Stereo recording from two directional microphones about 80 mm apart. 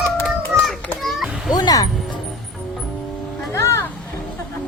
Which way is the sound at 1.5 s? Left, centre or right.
Left.